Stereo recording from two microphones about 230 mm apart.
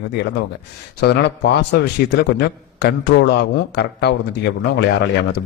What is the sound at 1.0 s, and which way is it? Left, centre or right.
A man's voice, left.